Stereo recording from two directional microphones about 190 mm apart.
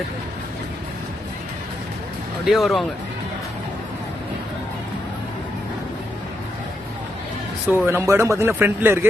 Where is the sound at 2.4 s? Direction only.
Centre (ahead or behind).